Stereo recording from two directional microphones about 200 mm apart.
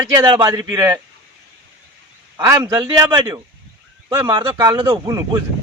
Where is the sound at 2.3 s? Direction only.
15° right (ahead or behind).